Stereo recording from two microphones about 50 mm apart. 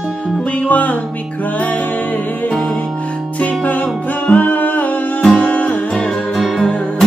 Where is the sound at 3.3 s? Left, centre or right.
Left.